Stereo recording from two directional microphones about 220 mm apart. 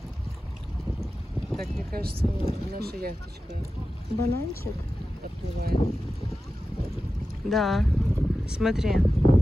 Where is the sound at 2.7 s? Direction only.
45° right (ahead or behind).